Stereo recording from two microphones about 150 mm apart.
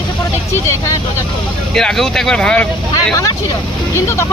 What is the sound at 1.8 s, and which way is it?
Speech, 5° left (ahead or behind).